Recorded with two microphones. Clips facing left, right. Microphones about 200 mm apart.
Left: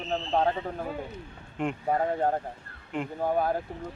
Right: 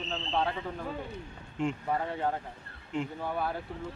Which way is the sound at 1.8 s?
40° left (ahead or behind).